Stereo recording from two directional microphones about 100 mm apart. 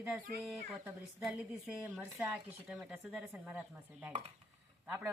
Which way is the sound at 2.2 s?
5° right (ahead or behind).